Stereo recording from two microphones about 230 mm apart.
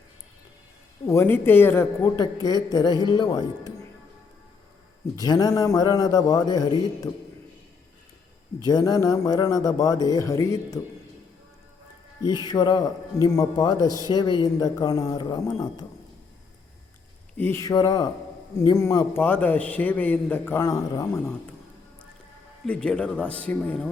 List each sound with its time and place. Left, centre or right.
1.0 s a man's voice: centre
5.1 s a man's voice: centre
8.6 s a man's voice: centre
12.5 s a man's voice: centre
17.3 s a man's voice: centre
22.6 s speech: centre